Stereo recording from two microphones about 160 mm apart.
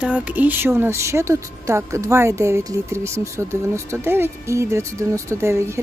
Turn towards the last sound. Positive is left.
turn(degrees=-15)  # may be behind; listen again after turning